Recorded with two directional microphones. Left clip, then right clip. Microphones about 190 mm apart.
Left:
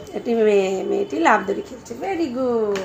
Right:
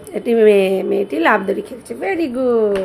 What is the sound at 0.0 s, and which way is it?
A woman's voice, 45° right (ahead or behind).